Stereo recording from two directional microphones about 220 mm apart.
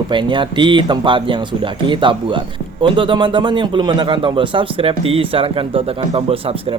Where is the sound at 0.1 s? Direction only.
20° right (ahead or behind).